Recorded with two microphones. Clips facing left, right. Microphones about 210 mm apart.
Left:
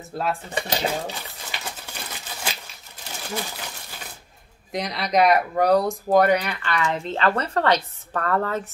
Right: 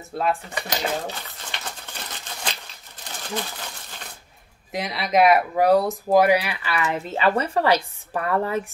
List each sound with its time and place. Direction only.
0.1 s speech: centre (ahead or behind)
0.6 s speech: 30° left (ahead or behind)
1.5 s a sound: 10° left (ahead or behind)
3.0 s crumpling: 10° left (ahead or behind)
4.7 s speech: 5° right (ahead or behind)